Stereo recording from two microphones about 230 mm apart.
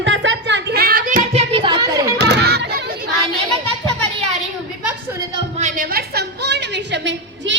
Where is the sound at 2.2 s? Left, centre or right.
Right.